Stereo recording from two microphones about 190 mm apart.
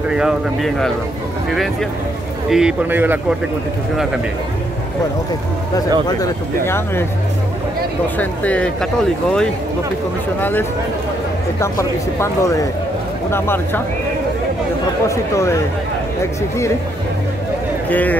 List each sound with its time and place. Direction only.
0.1 s a man's voice: 5° right (ahead or behind)
6.0 s speech: 20° left (ahead or behind)
8.2 s speech: 10° left (ahead or behind)
10.4 s speech: 10° left (ahead or behind)
15.0 s speech: 15° left (ahead or behind)
17.8 s a man's voice: 10° left (ahead or behind)